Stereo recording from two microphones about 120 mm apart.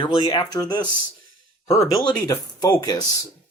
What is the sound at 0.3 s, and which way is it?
Speech, 35° left (ahead or behind).